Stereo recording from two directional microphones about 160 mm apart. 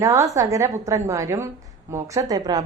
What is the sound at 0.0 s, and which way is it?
A woman's voice, 20° right (ahead or behind).